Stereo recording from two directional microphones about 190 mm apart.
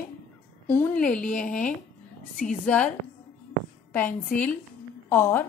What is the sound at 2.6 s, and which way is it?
Speech, 5° left (ahead or behind).